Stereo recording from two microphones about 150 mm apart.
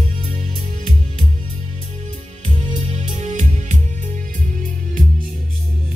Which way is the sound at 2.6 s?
50° right (ahead or behind).